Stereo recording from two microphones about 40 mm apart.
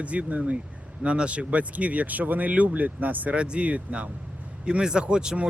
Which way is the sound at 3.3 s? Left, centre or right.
Right.